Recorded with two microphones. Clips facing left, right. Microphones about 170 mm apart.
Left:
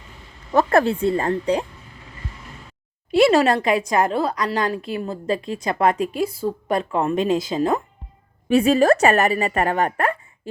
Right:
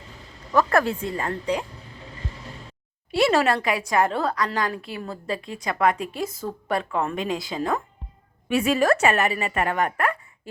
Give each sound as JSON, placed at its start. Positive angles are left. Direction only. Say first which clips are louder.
{"t": 0.5, "sound": "speech", "louder": "left 4 dB", "side_deg": 25}
{"t": 3.1, "sound": "a sound", "louder": "left 6 dB", "side_deg": 15}
{"t": 3.4, "sound": "a woman's voice", "louder": "left 4 dB", "side_deg": 25}
{"t": 4.4, "sound": "a woman's voice", "louder": "left 4 dB", "side_deg": 25}
{"t": 6.1, "sound": "a woman's voice", "louder": "left 6 dB", "side_deg": 10}